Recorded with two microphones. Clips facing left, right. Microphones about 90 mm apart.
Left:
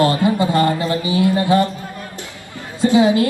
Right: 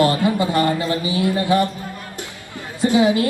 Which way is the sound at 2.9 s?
25° left (ahead or behind).